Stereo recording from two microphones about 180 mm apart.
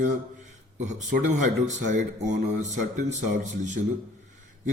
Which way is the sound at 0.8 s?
45° right (ahead or behind).